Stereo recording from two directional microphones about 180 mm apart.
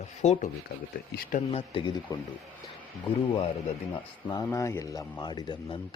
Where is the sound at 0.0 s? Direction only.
40° left (ahead or behind).